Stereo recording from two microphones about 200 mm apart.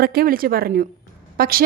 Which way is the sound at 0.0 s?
50° right (ahead or behind).